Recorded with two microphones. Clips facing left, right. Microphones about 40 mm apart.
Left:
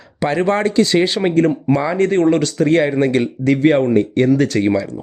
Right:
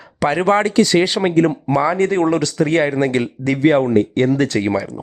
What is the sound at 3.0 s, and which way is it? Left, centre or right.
Speech, right.